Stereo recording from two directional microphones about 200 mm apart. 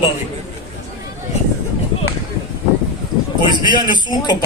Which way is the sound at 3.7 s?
20° left (ahead or behind).